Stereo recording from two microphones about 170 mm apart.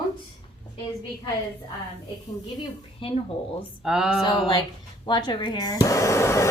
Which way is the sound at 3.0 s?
35° left (ahead or behind).